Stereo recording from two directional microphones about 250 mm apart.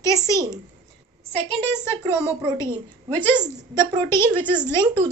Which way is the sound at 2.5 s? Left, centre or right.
Centre.